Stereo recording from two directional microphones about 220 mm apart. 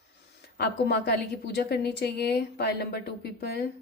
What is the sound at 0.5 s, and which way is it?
Speech, 50° left (ahead or behind).